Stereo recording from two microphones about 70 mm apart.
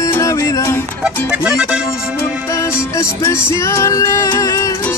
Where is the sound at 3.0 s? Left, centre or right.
Left.